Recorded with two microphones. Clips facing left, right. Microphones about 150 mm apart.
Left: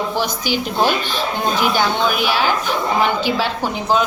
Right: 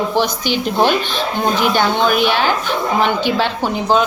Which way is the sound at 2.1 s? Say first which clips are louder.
Right 4 dB; 5° left (ahead or behind).